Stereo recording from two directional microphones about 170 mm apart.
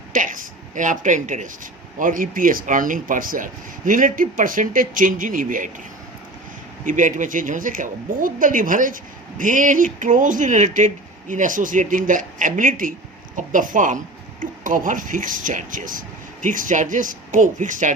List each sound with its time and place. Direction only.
0.1 s speech: 50° right (ahead or behind)
6.8 s speech: 50° right (ahead or behind)